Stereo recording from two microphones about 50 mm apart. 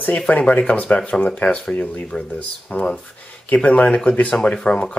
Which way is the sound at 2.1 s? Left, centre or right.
Centre.